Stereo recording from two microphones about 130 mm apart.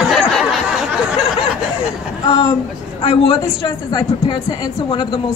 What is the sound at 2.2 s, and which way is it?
A man's voice, 45° left (ahead or behind).